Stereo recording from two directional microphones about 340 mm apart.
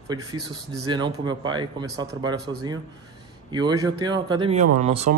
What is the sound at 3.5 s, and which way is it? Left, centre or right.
A man's voice, centre.